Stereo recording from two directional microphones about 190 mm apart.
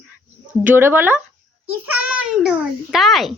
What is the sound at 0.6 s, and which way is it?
Child singing, 10° right (ahead or behind).